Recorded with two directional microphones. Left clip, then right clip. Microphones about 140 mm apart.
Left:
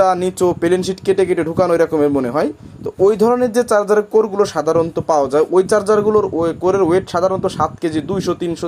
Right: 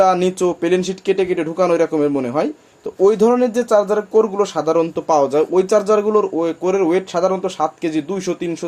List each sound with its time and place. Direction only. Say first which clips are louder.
0.0 s speech: even; 45° left (ahead or behind)